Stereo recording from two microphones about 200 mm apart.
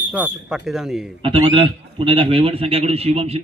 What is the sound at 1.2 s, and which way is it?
A man's voice, 25° right (ahead or behind).